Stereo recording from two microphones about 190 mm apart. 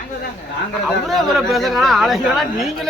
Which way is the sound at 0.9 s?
Centre (ahead or behind).